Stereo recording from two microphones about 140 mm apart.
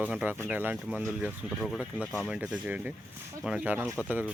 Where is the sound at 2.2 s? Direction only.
10° right (ahead or behind).